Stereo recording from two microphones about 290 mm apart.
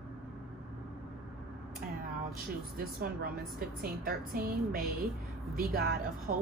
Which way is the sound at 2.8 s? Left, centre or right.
Right.